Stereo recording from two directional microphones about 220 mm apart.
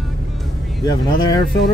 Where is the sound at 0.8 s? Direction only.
20° left (ahead or behind).